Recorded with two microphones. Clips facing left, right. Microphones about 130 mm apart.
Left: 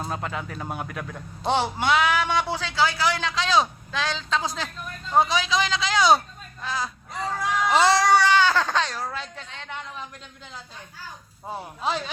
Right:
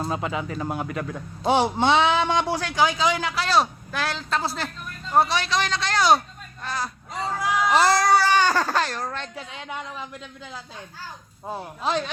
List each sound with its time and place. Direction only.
0.0 s speech: 5° right (ahead or behind)
1.5 s a man's voice: 15° right (ahead or behind)
1.9 s a man's voice: 25° right (ahead or behind); by 9.3 s 5° left (ahead or behind)
9.3 s a man's voice: 10° right (ahead or behind)
11.5 s speech: centre (ahead or behind)